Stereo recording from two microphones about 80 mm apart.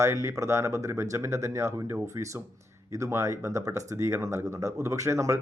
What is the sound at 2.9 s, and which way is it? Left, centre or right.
Speech, right.